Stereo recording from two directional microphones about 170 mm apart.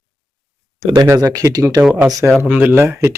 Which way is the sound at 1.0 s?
20° right (ahead or behind).